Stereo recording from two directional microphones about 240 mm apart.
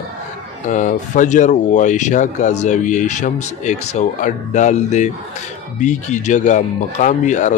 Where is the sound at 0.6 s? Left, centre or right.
Left.